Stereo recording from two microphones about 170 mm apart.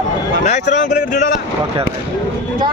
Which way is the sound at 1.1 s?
50° left (ahead or behind).